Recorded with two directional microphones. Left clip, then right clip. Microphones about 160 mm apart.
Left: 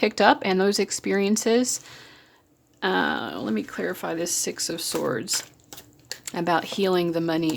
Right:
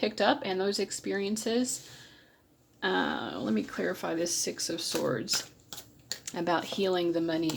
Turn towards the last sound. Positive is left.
turn(degrees=50)  # may be behind; listen again after turning